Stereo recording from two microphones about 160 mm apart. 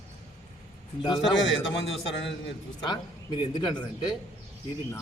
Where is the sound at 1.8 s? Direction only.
90° left.